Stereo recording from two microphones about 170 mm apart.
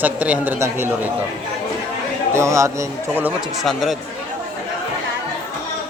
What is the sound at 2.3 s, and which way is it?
Speech, 15° right (ahead or behind).